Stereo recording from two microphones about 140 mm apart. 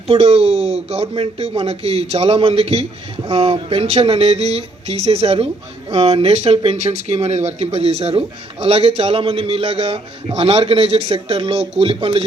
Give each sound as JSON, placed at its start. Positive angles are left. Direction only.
{"t": 0.1, "sound": "speech", "side_deg": -45}